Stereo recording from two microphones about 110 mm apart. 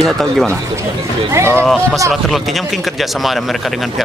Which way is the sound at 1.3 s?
25° right (ahead or behind).